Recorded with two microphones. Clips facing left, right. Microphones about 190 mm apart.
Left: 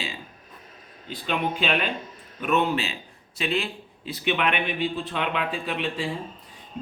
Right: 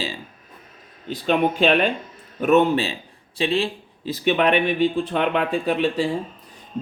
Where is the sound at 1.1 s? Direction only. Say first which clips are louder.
Right 7 dB; 45° right (ahead or behind).